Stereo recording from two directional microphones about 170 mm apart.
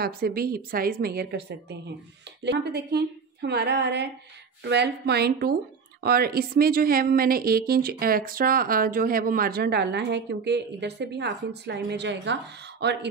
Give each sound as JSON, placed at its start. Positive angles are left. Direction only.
{"t": 0.0, "sound": "a woman's voice", "side_deg": -65}